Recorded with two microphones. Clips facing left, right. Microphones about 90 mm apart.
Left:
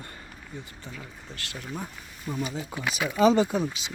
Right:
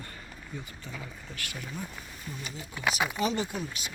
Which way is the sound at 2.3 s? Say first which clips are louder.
Left 11 dB; 90° left.